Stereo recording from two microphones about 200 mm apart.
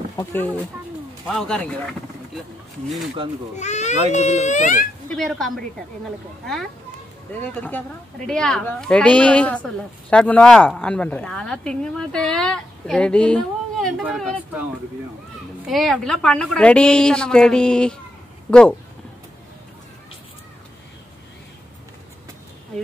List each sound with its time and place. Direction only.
0.1 s speech: 10° left (ahead or behind)
3.5 s speech: 35° left (ahead or behind)
5.1 s speech: centre (ahead or behind)
15.6 s speech: centre (ahead or behind)